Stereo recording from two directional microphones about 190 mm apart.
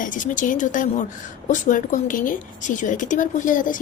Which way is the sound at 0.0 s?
45° left (ahead or behind).